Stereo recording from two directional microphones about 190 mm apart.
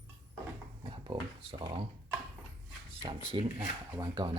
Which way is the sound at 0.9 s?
25° right (ahead or behind).